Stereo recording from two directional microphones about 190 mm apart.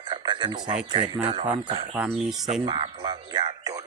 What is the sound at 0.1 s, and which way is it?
Speech, 25° right (ahead or behind).